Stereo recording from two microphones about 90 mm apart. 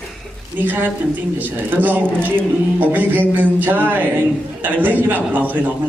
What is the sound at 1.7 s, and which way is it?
Speech, 20° right (ahead or behind).